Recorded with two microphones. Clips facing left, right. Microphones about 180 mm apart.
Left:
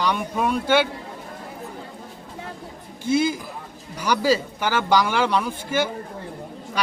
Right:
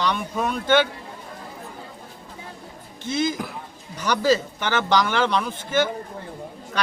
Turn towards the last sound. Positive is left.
turn(degrees=10)  # may be behind; listen again after turning